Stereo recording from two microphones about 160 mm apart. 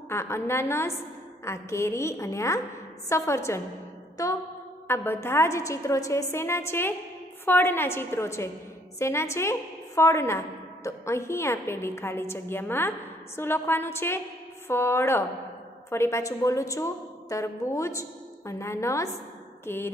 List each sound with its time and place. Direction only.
0.1 s a woman's voice: 15° left (ahead or behind)
4.8 s a woman's voice: 15° left (ahead or behind)